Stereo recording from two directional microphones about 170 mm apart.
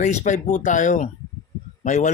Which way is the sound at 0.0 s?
45° left (ahead or behind).